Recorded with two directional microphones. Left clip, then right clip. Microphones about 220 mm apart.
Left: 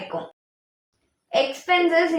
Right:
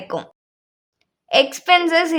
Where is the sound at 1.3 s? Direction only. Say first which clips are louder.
Right 6 dB; 45° right (ahead or behind).